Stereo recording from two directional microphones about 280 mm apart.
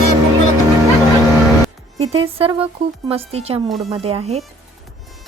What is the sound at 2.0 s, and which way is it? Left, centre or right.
Music, right.